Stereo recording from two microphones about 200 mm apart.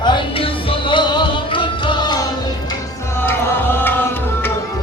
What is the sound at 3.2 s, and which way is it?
Tabla, 10° left (ahead or behind).